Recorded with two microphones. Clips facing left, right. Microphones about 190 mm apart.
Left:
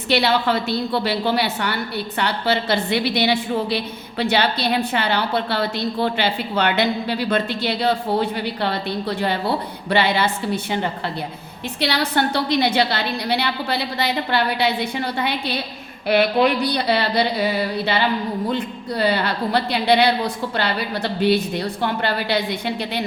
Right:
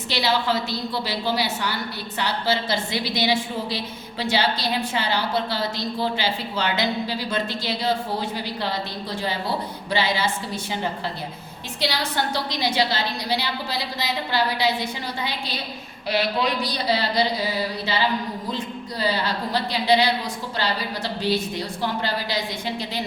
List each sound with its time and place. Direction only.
0.1 s a woman's voice: 60° left (ahead or behind)
11.8 s a woman's voice: 60° left (ahead or behind)